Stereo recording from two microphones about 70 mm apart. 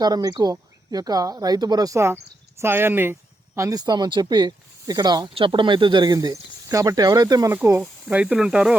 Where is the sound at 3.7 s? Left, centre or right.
Right.